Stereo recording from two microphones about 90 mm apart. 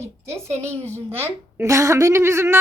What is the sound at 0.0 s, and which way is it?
A woman's voice, 30° right (ahead or behind).